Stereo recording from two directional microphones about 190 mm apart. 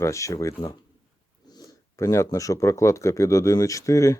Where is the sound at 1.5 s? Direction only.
20° left (ahead or behind).